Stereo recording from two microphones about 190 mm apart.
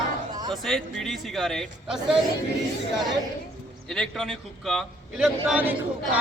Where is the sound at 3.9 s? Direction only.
Centre (ahead or behind).